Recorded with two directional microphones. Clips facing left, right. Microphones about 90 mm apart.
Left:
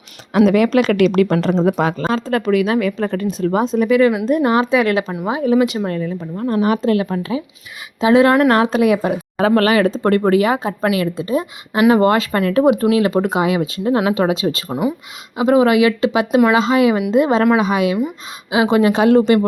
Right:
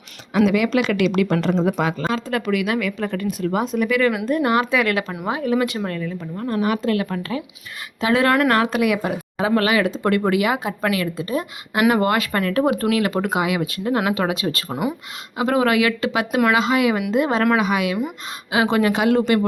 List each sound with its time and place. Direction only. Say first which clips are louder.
0.3 s speech: left 5 dB; 45° left (ahead or behind); by 9.1 s 30° left (ahead or behind)
9.4 s speech: left 5 dB; 45° left (ahead or behind); by 14.6 s 20° left (ahead or behind)
14.7 s speech: left 4 dB; 5° right (ahead or behind)
15.4 s speech: left 5 dB; 20° left (ahead or behind)
18.9 s speech: left 5 dB; 30° left (ahead or behind)